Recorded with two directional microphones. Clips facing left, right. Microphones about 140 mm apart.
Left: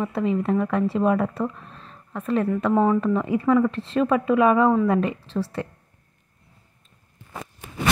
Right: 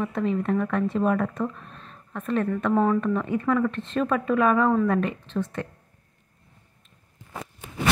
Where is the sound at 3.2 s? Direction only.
15° left (ahead or behind).